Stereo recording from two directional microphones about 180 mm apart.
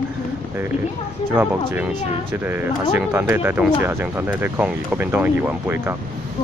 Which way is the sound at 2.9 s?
10° right (ahead or behind).